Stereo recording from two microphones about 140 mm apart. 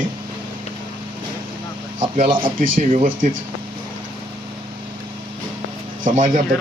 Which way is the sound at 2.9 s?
70° right (ahead or behind).